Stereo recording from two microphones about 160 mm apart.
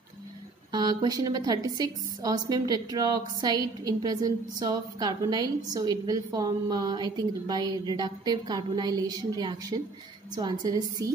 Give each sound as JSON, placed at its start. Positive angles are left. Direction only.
{"t": 0.7, "sound": "a woman's voice", "side_deg": -25}